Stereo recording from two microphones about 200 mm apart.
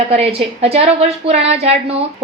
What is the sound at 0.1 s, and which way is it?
A woman's voice, 30° right (ahead or behind).